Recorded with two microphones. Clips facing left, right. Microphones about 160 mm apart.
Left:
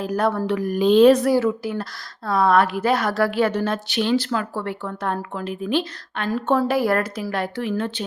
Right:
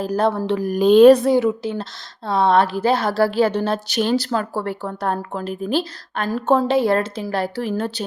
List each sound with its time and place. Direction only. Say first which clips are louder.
0.0 s a woman's voice: right 2 dB; 30° right (ahead or behind)
0.8 s speech: right 3 dB; 45° right (ahead or behind)
1.1 s a woman's voice: right 2 dB; 25° right (ahead or behind); by 6.6 s 40° right (ahead or behind)
6.6 s a woman's voice: right 2 dB; 25° right (ahead or behind); by 8.0 s 40° right (ahead or behind)